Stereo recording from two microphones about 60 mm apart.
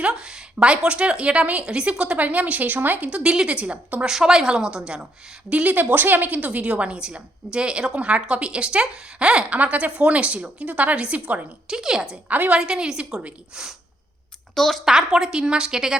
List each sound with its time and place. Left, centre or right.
0.1 s a woman's voice: centre
4.0 s a woman's voice: centre
5.5 s a woman's voice: right
11.7 s a woman's voice: centre
12.3 s a woman's voice: right
12.5 s a woman's voice: centre
14.5 s a woman's voice: centre
14.8 s a woman's voice: centre